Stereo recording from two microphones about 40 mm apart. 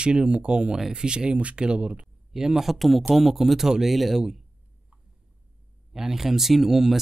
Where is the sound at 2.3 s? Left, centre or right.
Centre.